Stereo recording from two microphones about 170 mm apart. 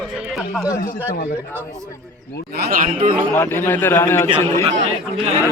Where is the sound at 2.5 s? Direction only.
60° right (ahead or behind).